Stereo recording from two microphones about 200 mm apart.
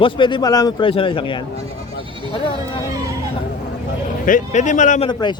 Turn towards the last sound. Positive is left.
turn(degrees=20)  # may be behind; listen again after turning